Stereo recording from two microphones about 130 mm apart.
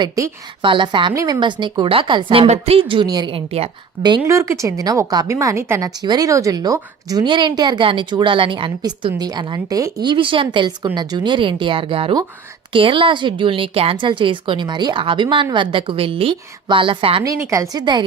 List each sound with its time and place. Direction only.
0.0 s a woman's voice: 35° right (ahead or behind)
1.1 s a woman's voice: 25° right (ahead or behind)
1.4 s a woman's voice: 35° right (ahead or behind)
4.3 s a woman's voice: 25° right (ahead or behind); by 17.2 s 45° right (ahead or behind)
17.2 s a woman's voice: 25° right (ahead or behind)